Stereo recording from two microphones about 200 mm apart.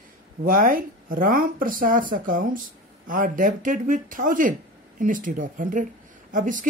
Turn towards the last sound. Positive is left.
turn(degrees=-40)  # may be behind; listen again after turning